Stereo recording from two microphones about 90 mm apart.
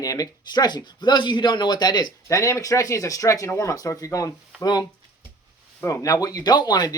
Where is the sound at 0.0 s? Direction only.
40° left (ahead or behind).